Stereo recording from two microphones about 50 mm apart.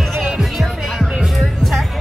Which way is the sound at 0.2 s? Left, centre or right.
Centre.